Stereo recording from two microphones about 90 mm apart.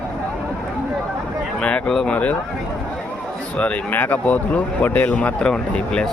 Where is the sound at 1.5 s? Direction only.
10° left (ahead or behind).